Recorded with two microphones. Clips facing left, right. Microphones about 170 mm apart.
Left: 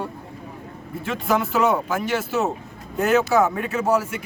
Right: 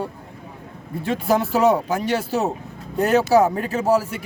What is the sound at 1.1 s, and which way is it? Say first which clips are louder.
Speech: right 3 dB; 35° right (ahead or behind).